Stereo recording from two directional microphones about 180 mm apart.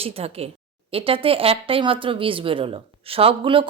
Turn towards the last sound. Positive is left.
turn(degrees=-30)  # may be behind; listen again after turning